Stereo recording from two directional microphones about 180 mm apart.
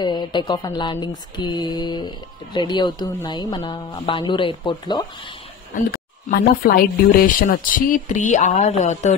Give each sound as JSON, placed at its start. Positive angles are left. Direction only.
{"t": 0.0, "sound": "speech", "side_deg": 25}
{"t": 5.8, "sound": "speech", "side_deg": 55}